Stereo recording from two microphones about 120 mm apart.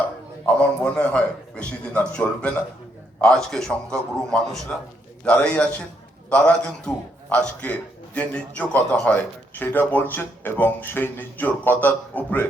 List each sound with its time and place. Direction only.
0.4 s a man's voice: 10° left (ahead or behind)